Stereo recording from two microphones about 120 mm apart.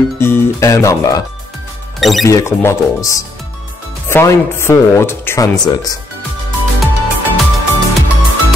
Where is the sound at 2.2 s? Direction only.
25° left (ahead or behind).